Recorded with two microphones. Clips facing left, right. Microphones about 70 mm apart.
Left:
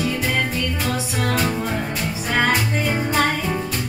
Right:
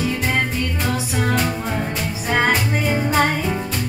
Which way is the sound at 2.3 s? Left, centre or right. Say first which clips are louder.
Right 1 dB; right.